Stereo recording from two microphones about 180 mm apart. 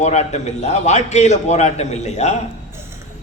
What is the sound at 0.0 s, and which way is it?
A man's voice, 40° left (ahead or behind).